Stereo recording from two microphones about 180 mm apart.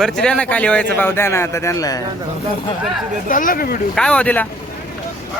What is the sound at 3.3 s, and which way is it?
Speech, 50° left (ahead or behind).